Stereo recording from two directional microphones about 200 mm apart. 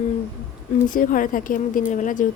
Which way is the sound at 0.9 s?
45° left (ahead or behind).